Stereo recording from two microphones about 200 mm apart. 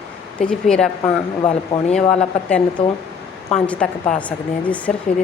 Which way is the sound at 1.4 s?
25° left (ahead or behind).